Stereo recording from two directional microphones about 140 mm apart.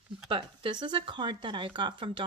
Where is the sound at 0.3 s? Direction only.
35° right (ahead or behind).